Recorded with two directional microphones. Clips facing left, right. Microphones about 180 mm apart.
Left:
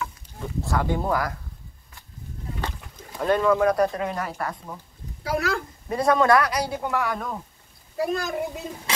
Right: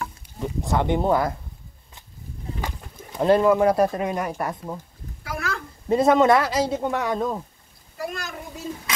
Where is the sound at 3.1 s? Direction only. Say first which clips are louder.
Right 3 dB; 25° right (ahead or behind).